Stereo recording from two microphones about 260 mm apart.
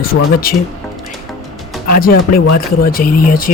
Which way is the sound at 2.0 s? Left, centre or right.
Left.